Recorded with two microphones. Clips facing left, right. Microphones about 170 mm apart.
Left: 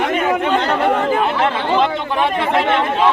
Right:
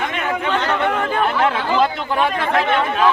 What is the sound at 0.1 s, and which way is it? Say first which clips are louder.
Chatter: left 5 dB; 40° left (ahead or behind).